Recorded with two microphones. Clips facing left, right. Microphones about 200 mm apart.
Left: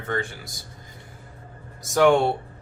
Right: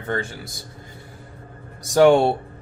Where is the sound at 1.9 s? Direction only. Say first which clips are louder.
Right 4 dB; 30° right (ahead or behind).